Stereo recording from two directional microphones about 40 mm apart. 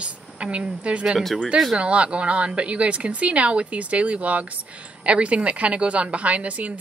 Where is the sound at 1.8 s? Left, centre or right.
Right.